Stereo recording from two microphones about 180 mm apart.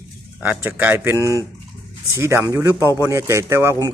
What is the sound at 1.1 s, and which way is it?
Speech, 15° left (ahead or behind).